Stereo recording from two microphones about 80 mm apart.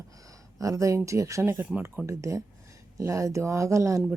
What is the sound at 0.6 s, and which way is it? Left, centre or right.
Speech, right.